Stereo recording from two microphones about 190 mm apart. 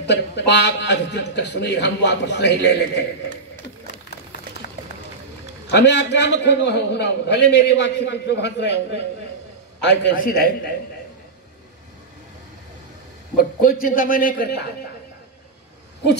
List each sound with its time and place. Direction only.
0.1 s a man's voice: 65° left (ahead or behind)
5.7 s a man's voice: 65° left (ahead or behind)
9.8 s a man's voice: 65° left (ahead or behind)
13.4 s a man's voice: 50° left (ahead or behind)